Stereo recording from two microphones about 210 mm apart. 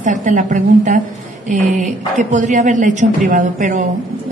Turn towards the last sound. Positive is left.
turn(degrees=-35)  # may be behind; listen again after turning